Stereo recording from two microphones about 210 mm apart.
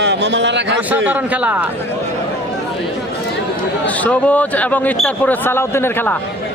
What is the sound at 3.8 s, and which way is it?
A man's voice, 5° left (ahead or behind).